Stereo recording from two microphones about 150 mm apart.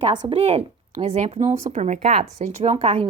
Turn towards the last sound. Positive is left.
turn(degrees=-40)  # may be behind; listen again after turning